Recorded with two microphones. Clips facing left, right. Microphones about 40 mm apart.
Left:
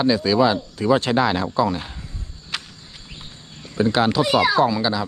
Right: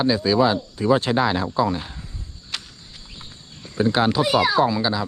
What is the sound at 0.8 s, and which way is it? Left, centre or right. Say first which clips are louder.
Speech: left 1 dB; left.